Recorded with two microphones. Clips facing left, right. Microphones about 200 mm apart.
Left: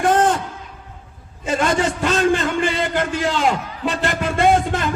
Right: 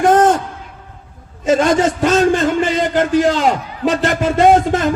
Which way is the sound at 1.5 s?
50° right (ahead or behind).